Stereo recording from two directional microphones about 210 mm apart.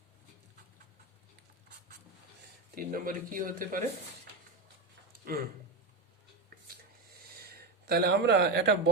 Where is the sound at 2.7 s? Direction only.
40° right (ahead or behind).